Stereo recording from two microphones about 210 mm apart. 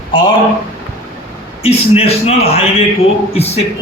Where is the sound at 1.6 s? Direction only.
30° left (ahead or behind).